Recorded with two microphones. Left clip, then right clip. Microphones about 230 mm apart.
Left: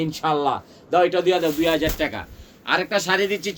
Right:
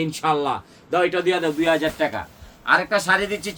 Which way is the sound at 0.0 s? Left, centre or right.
Right.